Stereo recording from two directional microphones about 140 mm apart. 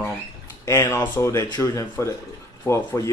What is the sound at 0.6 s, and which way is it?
Speech, 20° left (ahead or behind).